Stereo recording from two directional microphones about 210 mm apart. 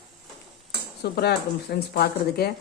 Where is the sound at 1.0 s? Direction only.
50° left (ahead or behind).